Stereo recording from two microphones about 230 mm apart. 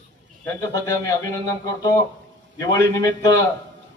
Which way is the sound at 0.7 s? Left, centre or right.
Centre.